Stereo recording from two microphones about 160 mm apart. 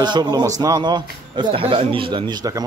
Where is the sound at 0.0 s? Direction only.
25° right (ahead or behind).